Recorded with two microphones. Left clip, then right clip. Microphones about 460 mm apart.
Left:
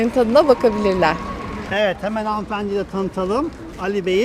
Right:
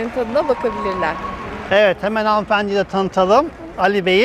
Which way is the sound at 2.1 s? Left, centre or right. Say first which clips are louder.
Right 7 dB; right.